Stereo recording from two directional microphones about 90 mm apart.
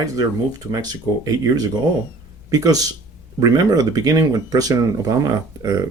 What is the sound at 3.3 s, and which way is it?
Speech, 40° right (ahead or behind).